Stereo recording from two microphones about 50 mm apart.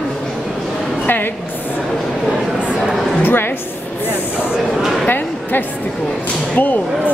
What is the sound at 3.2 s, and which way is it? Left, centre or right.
Speech, left.